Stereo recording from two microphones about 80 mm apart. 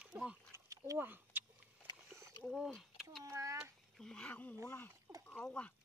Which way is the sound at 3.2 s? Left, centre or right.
Right.